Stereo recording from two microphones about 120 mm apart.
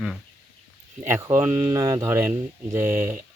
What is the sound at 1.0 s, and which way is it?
Speech, 20° right (ahead or behind).